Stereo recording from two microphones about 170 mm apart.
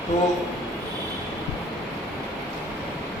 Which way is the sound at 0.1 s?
45° left (ahead or behind).